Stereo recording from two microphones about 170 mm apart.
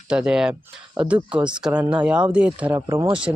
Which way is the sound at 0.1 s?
5° right (ahead or behind).